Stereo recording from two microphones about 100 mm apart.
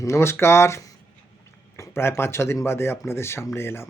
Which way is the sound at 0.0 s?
25° left (ahead or behind).